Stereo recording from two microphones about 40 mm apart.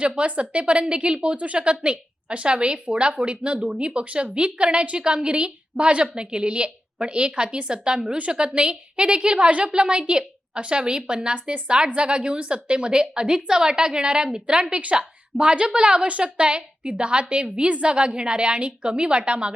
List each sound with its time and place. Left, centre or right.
0.2 s a woman's voice: right
9.8 s a woman's voice: right